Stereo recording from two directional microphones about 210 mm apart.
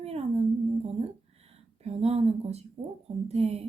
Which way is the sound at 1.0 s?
30° right (ahead or behind).